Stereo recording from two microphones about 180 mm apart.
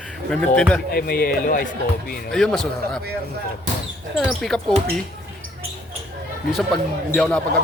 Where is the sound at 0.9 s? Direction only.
60° left (ahead or behind).